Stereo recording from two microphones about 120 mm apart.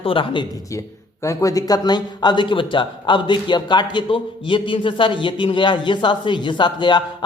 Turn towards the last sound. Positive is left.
turn(degrees=40)  # may be behind; listen again after turning